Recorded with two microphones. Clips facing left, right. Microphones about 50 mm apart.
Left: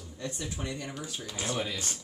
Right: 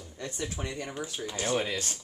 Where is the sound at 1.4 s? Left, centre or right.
Right.